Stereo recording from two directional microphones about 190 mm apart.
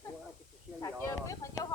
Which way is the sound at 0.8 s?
15° left (ahead or behind).